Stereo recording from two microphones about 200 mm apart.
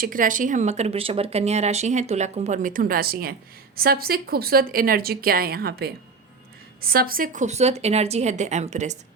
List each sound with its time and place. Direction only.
0.0 s a woman's voice: 45° right (ahead or behind)